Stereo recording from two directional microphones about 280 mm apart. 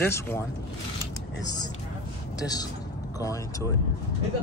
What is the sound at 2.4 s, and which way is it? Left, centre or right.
Speech, centre.